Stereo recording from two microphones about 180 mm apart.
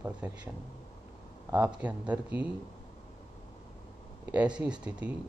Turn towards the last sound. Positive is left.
turn(degrees=-5)  # may be behind; listen again after turning